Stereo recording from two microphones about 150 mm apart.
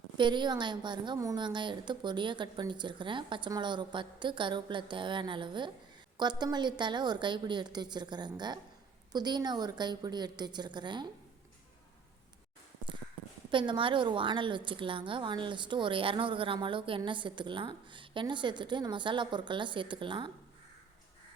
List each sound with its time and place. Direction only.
0.2 s a woman's voice: 30° right (ahead or behind)
13.5 s a woman's voice: 35° right (ahead or behind)